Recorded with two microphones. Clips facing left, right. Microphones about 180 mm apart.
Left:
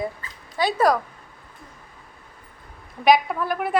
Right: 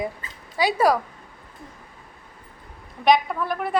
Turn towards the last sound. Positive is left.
turn(degrees=5)  # may be behind; listen again after turning